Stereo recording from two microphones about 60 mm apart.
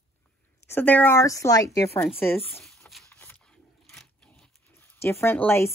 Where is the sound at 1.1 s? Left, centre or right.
Left.